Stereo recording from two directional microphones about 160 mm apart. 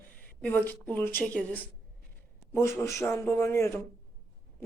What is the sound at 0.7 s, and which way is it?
A woman's voice, 10° left (ahead or behind).